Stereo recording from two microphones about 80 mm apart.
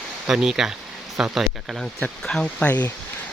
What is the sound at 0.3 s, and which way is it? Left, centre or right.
Speech, centre.